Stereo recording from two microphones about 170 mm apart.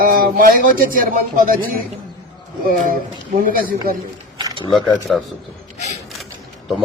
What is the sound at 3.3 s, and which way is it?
Speech, 55° right (ahead or behind).